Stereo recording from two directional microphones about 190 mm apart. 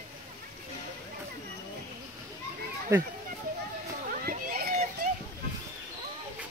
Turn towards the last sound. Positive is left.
turn(degrees=-50)  # may be behind; listen again after turning